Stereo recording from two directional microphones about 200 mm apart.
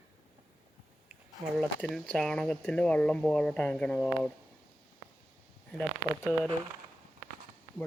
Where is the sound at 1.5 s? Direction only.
5° left (ahead or behind).